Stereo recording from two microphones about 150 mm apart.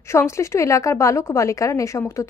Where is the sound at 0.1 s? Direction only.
20° left (ahead or behind).